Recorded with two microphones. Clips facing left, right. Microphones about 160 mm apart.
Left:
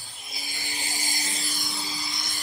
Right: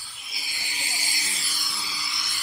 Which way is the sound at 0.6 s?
40° left (ahead or behind).